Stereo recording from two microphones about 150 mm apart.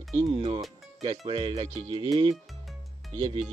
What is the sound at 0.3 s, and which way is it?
Speech, 40° right (ahead or behind).